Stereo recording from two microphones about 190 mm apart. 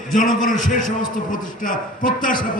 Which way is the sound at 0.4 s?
45° left (ahead or behind).